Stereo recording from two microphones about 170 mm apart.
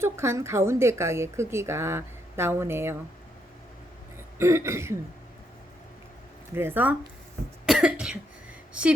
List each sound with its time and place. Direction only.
0.0 s a woman's voice: 15° right (ahead or behind)
4.4 s a woman's voice: 15° right (ahead or behind)
6.5 s a woman's voice: 15° right (ahead or behind)
7.7 s cough: 5° right (ahead or behind)